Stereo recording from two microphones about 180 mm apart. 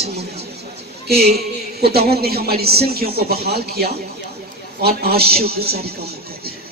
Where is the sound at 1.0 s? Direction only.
60° right (ahead or behind).